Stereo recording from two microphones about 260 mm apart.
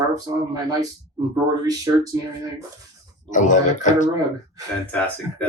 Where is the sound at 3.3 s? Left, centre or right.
Left.